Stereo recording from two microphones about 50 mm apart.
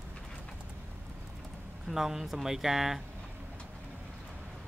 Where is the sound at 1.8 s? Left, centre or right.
Centre.